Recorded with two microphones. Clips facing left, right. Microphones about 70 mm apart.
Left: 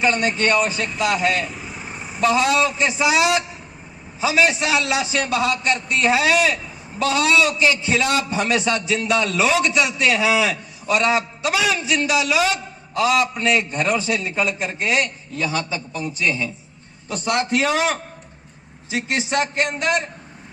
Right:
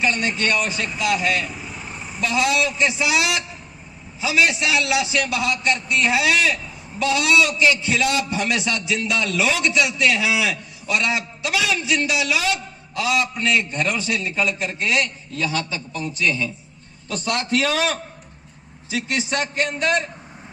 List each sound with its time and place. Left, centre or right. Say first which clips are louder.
0.0 s a man's voice: left 3 dB; left
1.5 s vehicle: left 1 dB; centre
2.2 s a man's voice: left 3 dB; left